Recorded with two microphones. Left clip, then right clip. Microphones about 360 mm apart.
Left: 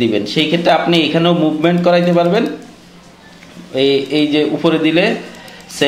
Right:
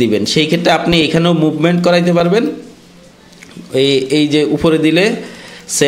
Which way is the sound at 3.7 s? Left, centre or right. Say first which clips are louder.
Right 2 dB; right.